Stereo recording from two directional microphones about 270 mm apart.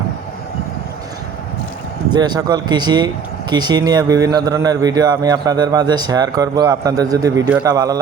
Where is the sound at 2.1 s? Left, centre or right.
Centre.